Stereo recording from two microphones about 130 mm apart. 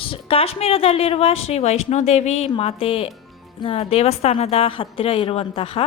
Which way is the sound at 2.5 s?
45° left (ahead or behind).